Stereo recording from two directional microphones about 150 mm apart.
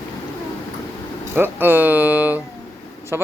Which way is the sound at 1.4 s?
15° right (ahead or behind).